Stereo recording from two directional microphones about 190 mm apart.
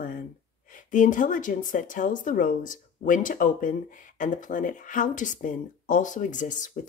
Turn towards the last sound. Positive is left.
turn(degrees=40)  # may be behind; listen again after turning